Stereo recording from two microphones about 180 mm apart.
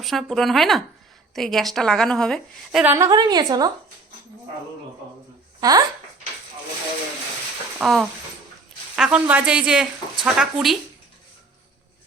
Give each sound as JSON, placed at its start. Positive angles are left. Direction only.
{"t": 0.0, "sound": "speech", "side_deg": 0}
{"t": 2.8, "sound": "a woman's voice", "side_deg": -15}
{"t": 5.5, "sound": "speech", "side_deg": -20}
{"t": 7.8, "sound": "speech", "side_deg": 0}